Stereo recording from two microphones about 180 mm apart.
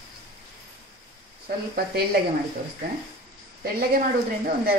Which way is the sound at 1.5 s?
55° right (ahead or behind).